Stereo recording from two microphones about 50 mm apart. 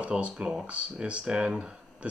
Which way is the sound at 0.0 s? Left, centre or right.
Right.